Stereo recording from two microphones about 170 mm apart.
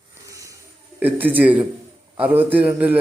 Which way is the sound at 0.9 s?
10° right (ahead or behind).